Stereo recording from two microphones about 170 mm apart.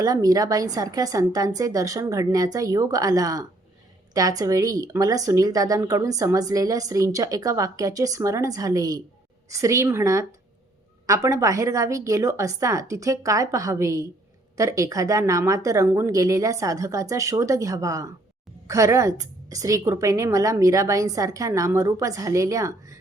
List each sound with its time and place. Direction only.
0.0 s speech: 20° right (ahead or behind)